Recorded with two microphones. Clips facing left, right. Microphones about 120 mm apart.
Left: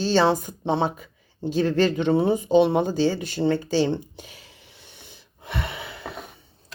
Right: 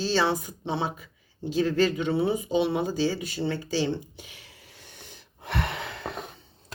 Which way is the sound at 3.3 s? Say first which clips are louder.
Left 6 dB; 55° left (ahead or behind).